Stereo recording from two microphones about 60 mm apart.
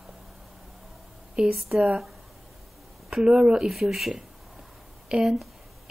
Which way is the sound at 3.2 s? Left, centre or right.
Centre.